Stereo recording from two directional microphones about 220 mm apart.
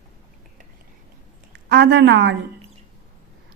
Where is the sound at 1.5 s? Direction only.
50° right (ahead or behind).